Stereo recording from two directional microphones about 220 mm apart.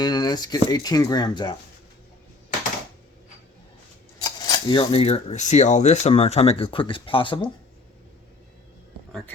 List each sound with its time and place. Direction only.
0.0 s speech: 20° left (ahead or behind)
4.2 s speech: 20° left (ahead or behind)